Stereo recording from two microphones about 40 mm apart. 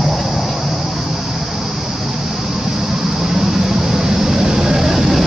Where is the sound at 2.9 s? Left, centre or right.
Centre.